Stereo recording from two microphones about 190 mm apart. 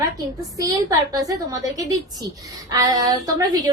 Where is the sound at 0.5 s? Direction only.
15° right (ahead or behind).